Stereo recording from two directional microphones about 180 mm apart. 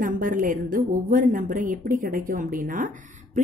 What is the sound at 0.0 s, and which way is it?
A woman's voice, 45° right (ahead or behind).